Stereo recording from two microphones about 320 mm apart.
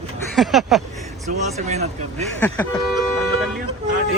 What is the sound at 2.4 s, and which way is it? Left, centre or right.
Speech, centre.